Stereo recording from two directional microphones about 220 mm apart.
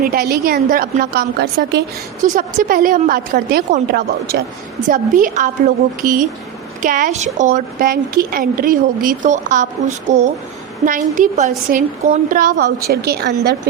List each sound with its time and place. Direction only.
0.0 s a woman's voice: 40° right (ahead or behind)